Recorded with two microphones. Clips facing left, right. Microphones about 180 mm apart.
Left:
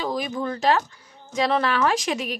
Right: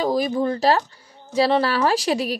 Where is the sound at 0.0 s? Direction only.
35° right (ahead or behind).